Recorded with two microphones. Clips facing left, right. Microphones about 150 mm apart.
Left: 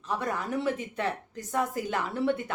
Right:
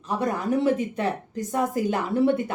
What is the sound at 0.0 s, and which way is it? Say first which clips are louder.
A woman's voice: right 5 dB; 15° right (ahead or behind).